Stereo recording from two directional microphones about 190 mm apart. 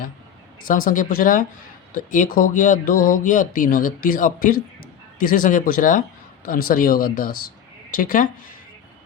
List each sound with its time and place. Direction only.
0.6 s a woman's voice: 45° left (ahead or behind)